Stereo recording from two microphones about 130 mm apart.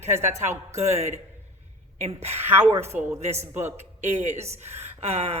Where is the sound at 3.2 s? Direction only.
60° right (ahead or behind).